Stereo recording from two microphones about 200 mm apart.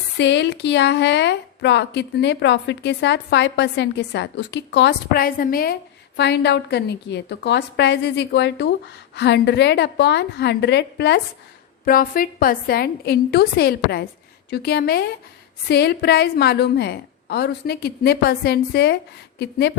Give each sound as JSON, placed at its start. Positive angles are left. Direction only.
{"t": 0.2, "sound": "a woman's voice", "side_deg": 60}
{"t": 11.9, "sound": "a woman's voice", "side_deg": 45}